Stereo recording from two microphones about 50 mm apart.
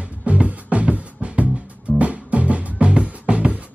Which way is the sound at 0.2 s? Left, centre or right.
Right.